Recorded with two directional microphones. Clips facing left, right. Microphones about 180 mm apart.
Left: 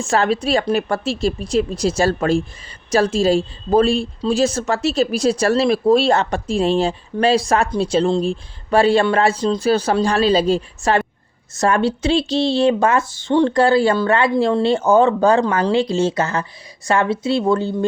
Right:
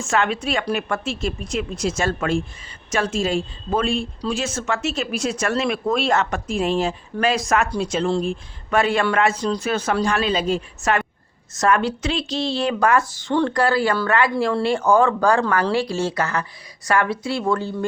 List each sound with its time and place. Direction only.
0.0 s speech: 35° left (ahead or behind)